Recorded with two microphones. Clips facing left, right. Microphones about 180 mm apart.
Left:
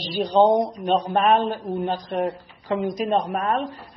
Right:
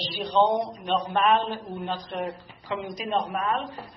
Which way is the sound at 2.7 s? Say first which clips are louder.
Left 6 dB; 50° left (ahead or behind).